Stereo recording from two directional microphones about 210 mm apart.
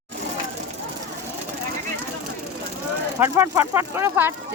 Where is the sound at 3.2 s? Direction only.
10° right (ahead or behind).